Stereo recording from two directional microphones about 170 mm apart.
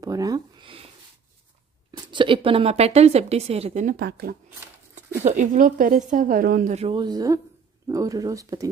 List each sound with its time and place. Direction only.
0.0 s a sound: 20° right (ahead or behind)
1.9 s a woman's voice: 30° right (ahead or behind)
3.9 s speech: 65° right (ahead or behind)
5.2 s speech: 45° right (ahead or behind)
6.7 s speech: 35° right (ahead or behind)